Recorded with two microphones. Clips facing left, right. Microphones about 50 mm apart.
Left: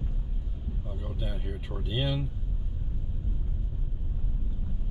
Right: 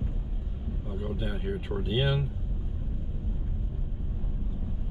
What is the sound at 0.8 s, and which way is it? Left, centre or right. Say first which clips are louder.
Speech: right 5 dB; centre.